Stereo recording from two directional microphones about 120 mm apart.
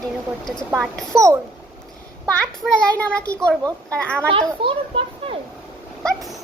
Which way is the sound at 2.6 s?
10° left (ahead or behind).